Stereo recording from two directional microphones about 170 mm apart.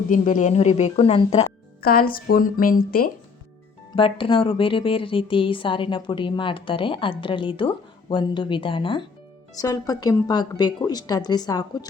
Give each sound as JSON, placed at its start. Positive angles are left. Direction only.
{"t": 0.1, "sound": "a woman's voice", "side_deg": 50}
{"t": 1.8, "sound": "a woman's voice", "side_deg": 60}
{"t": 3.9, "sound": "a woman's voice", "side_deg": 30}